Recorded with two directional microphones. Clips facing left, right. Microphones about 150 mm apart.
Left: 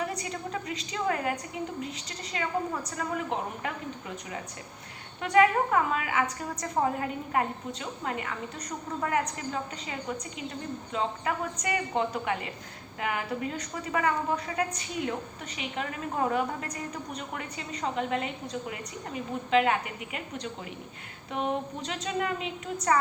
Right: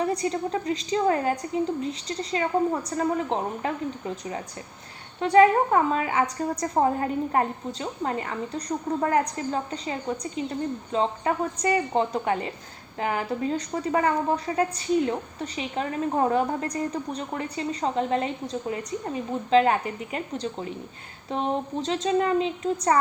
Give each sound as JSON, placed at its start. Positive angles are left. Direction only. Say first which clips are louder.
{"t": 0.0, "sound": "a woman's voice", "louder": "right 8 dB", "side_deg": -35}